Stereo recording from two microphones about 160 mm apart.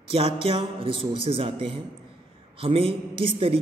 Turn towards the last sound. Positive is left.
turn(degrees=-35)  # may be behind; listen again after turning